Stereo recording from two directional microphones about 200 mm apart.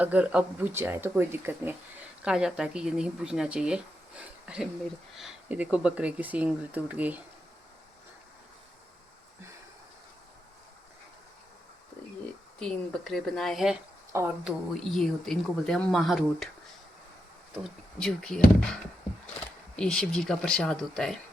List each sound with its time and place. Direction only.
0.0 s speech: 5° right (ahead or behind)
12.5 s speech: 5° left (ahead or behind)
17.6 s speech: 5° left (ahead or behind)
19.7 s speech: 5° left (ahead or behind)